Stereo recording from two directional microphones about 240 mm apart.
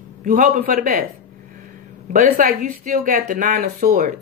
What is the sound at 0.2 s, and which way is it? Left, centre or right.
Speech, right.